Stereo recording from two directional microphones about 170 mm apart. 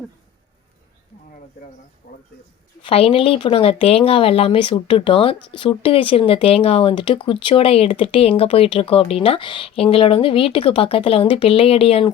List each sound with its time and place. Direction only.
2.0 s speech: 60° left (ahead or behind)
2.8 s speech: 35° left (ahead or behind)